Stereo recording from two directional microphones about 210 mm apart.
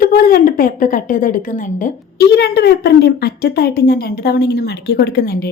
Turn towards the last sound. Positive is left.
turn(degrees=45)  # may be behind; listen again after turning